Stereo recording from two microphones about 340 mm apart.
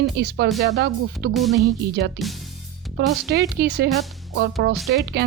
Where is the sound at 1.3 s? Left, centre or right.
Centre.